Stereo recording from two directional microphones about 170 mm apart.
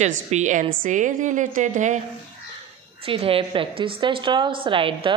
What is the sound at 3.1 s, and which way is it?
A woman's voice, 35° right (ahead or behind).